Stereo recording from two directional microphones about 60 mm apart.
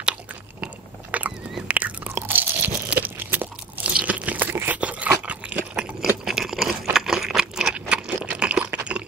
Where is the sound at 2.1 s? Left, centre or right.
Right.